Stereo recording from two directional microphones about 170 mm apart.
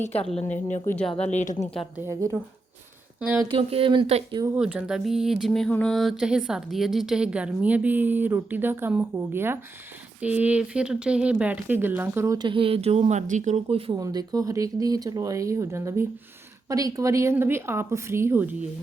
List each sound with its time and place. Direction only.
0.0 s a woman's voice: 40° left (ahead or behind)
0.9 s speech: 5° left (ahead or behind)
1.1 s a woman's voice: 40° left (ahead or behind)
2.0 s speech: 15° right (ahead or behind)
3.5 s speech: 35° right (ahead or behind)
4.5 s a sound: 5° right (ahead or behind)
10.2 s speech: 10° right (ahead or behind); by 13.9 s 35° right (ahead or behind)
13.9 s speech: 20° right (ahead or behind)